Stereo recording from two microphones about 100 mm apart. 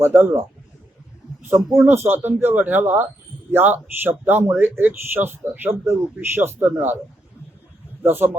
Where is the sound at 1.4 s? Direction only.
25° right (ahead or behind).